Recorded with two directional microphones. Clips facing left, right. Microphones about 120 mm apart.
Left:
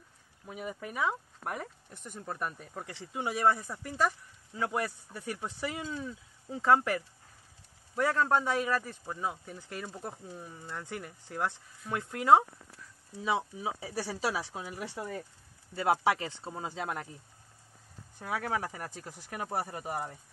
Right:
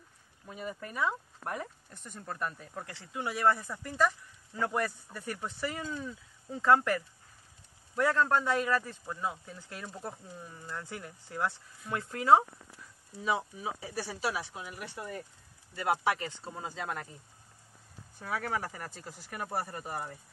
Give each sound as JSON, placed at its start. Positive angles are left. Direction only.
{"t": 0.5, "sound": "speech", "side_deg": 10}
{"t": 3.0, "sound": "speech", "side_deg": 20}
{"t": 13.6, "sound": "speech", "side_deg": 20}
{"t": 18.2, "sound": "speech", "side_deg": 15}